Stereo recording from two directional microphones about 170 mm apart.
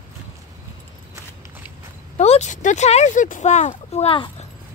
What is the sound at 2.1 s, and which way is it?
Speech, 40° left (ahead or behind).